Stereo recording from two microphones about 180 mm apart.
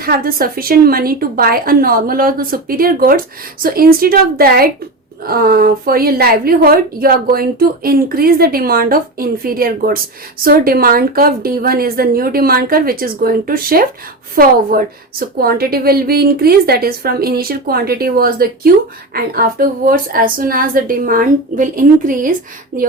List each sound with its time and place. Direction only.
0.0 s a woman's voice: 55° right (ahead or behind)